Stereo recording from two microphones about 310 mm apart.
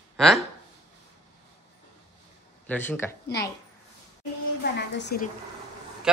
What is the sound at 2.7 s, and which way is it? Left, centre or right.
Speech, centre.